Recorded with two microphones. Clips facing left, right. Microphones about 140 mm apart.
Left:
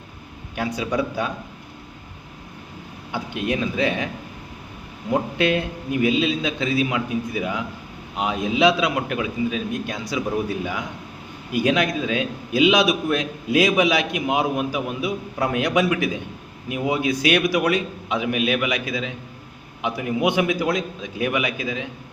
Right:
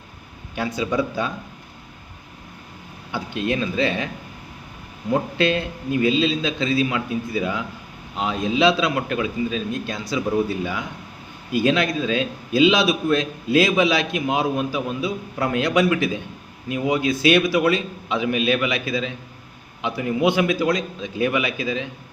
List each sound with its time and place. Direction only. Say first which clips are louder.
0.5 s a man's voice: right 1 dB; 10° left (ahead or behind)
3.1 s a man's voice: right 1 dB; 15° left (ahead or behind)
5.4 s a man's voice: even; 15° left (ahead or behind)
19.8 s a man's voice: right 1 dB; 15° left (ahead or behind)